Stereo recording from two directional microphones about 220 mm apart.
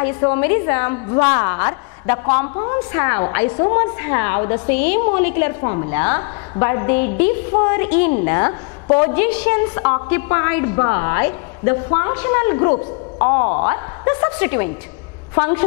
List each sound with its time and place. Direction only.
0.0 s a woman's voice: 10° left (ahead or behind)
8.8 s a woman's voice: 25° left (ahead or behind)
9.1 s a woman's voice: 10° left (ahead or behind)